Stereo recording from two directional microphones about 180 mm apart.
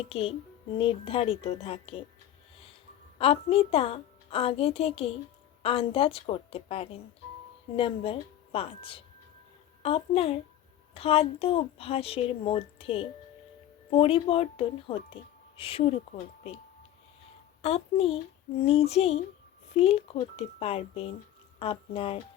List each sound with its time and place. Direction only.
0.1 s speech: 30° left (ahead or behind)
3.2 s speech: 35° left (ahead or behind)
17.6 s speech: 35° left (ahead or behind)